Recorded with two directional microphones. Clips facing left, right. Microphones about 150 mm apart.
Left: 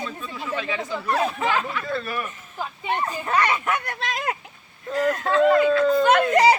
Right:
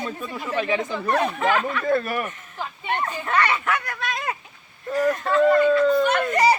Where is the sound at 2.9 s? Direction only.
10° left (ahead or behind).